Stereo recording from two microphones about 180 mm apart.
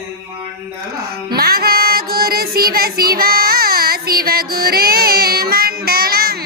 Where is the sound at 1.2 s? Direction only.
60° right (ahead or behind).